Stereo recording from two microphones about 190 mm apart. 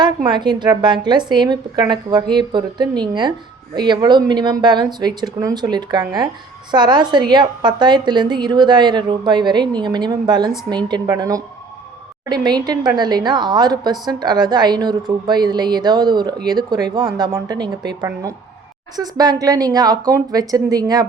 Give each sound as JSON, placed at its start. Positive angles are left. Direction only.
{"t": 0.3, "sound": "a woman's voice", "side_deg": -25}